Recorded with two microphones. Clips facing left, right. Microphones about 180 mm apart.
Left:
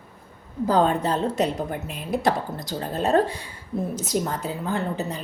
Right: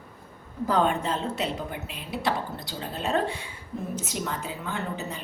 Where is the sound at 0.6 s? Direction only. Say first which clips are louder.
Left 4 dB; 35° left (ahead or behind).